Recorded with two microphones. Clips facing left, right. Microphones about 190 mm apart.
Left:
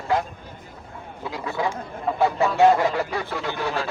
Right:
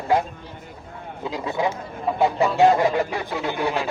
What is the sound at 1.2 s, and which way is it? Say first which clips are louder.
Speech: right 2 dB; 20° right (ahead or behind).